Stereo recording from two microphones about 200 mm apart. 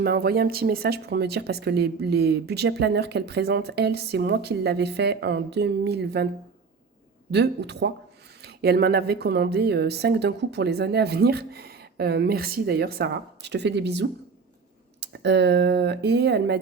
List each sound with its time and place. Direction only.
0.0 s speech: 50° right (ahead or behind)
7.3 s speech: 55° right (ahead or behind)